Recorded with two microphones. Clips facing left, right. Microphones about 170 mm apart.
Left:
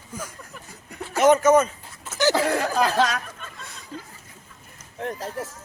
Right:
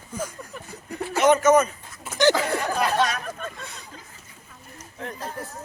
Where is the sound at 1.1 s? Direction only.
45° left (ahead or behind).